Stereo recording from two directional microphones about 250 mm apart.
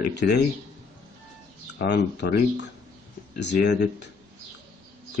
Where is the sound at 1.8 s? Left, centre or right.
Left.